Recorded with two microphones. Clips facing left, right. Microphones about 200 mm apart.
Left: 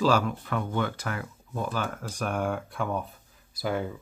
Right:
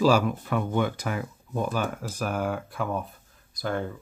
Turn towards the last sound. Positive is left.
turn(degrees=5)  # may be behind; listen again after turning